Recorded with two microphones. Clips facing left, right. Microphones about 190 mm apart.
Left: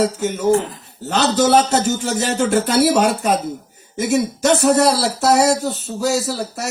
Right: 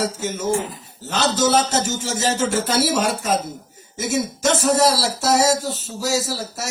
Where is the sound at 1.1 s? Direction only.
60° left (ahead or behind).